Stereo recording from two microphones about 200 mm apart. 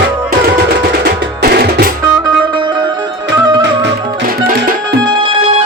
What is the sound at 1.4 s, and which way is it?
Music, 50° right (ahead or behind).